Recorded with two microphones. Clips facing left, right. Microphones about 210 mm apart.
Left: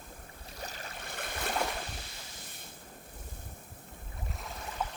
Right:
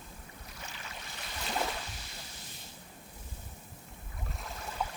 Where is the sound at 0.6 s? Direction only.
40° left (ahead or behind).